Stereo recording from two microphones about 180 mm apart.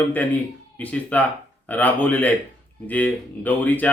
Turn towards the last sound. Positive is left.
turn(degrees=10)  # may be behind; listen again after turning